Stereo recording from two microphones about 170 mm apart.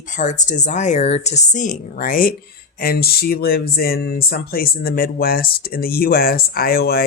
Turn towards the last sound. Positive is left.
turn(degrees=65)  # may be behind; listen again after turning